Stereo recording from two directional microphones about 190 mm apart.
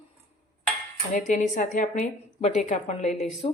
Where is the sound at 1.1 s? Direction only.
40° left (ahead or behind).